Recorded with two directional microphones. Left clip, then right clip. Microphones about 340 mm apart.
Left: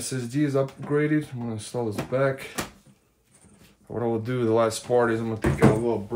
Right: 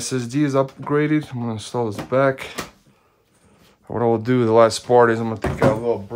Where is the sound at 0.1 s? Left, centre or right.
Centre.